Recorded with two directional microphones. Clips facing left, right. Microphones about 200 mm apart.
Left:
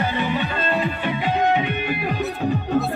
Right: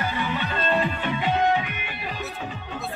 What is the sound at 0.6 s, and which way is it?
Music, 5° left (ahead or behind).